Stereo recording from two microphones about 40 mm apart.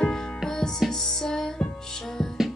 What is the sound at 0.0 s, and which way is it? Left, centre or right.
Music, centre.